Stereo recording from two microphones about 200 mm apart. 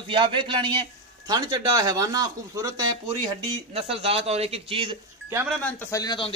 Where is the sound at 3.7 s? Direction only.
30° right (ahead or behind).